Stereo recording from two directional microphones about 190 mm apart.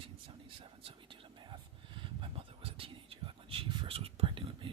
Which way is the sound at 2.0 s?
30° right (ahead or behind).